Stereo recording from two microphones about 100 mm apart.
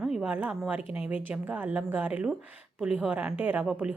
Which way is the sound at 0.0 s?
10° right (ahead or behind).